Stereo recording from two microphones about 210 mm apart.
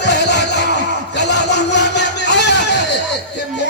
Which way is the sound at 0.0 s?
55° left (ahead or behind).